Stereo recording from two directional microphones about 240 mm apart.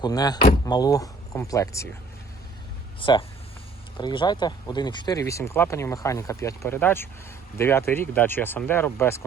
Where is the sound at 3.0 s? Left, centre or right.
Left.